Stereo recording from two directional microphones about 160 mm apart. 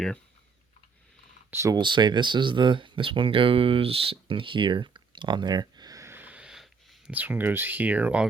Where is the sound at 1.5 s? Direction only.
20° right (ahead or behind).